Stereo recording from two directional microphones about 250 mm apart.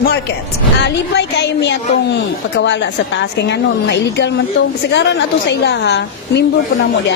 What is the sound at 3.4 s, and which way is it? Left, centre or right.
A woman's voice, left.